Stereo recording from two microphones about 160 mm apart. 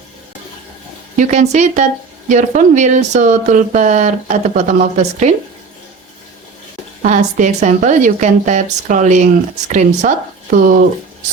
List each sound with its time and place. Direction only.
1.1 s speech: 50° right (ahead or behind)
7.0 s speech: 50° right (ahead or behind)